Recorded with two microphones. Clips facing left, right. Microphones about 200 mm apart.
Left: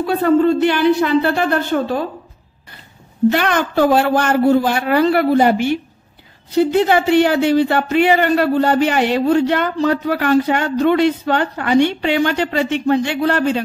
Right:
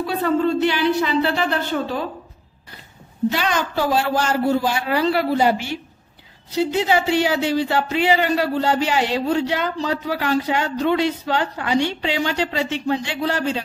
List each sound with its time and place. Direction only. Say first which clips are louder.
0.0 s speech: left 6 dB; 55° left (ahead or behind)
3.3 s speech: left 6 dB; 55° left (ahead or behind)